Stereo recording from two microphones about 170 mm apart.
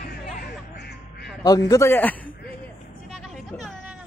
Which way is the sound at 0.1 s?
65° left (ahead or behind).